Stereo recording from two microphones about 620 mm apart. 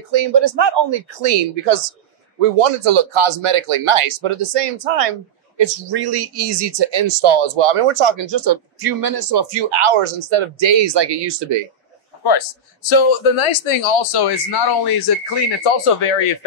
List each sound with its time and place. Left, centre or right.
0.1 s speech: right
1.3 s speech: right
2.6 s speech: right
5.6 s speech: right
12.2 s a man's voice: left
12.9 s speech: left
15.6 s speech: left